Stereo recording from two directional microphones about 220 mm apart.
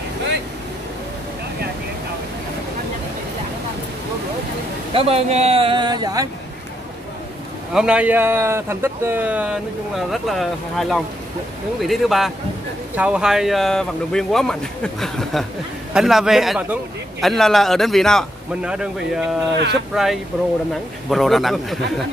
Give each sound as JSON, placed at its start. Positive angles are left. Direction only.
{"t": 4.9, "sound": "speech", "side_deg": -25}
{"t": 7.7, "sound": "a man's voice", "side_deg": -5}